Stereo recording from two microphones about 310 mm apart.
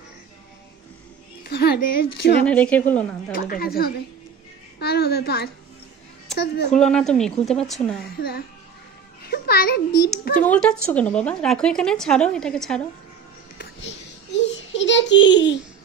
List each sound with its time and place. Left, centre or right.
1.4 s music: left
2.4 s speech: centre
3.3 s a woman's voice: left
6.7 s speech: centre
8.2 s a child's voice: left
10.4 s speech: centre
13.6 s a sound: left